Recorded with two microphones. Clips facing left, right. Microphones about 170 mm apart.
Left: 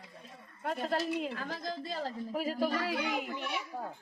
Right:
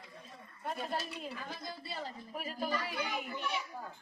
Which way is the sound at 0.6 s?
90° left.